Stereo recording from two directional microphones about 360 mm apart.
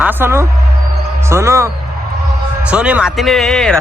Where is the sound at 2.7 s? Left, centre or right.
Centre.